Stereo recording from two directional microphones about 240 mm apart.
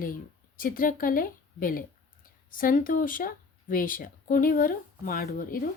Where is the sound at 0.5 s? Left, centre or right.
Left.